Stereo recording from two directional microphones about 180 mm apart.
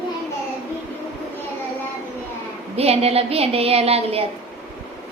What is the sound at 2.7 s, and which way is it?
A woman's voice, 35° right (ahead or behind).